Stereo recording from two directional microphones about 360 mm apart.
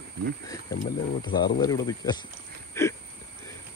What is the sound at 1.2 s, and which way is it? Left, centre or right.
Speech, centre.